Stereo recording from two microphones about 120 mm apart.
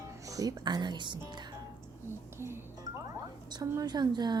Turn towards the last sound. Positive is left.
turn(degrees=-35)  # may be behind; listen again after turning